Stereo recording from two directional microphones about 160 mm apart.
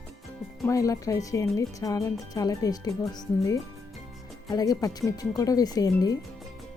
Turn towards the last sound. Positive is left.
turn(degrees=25)  # may be behind; listen again after turning